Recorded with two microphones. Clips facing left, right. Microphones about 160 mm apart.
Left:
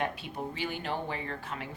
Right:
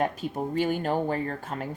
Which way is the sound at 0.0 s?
45° right (ahead or behind).